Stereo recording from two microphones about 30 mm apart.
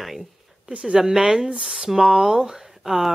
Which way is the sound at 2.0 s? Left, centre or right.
Centre.